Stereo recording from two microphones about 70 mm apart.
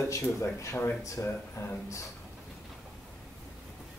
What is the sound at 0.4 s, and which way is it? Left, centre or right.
Speech, left.